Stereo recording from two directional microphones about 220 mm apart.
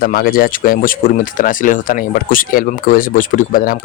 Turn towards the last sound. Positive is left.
turn(degrees=40)  # may be behind; listen again after turning